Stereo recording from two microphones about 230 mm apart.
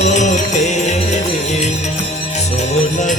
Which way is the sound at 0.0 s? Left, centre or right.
Left.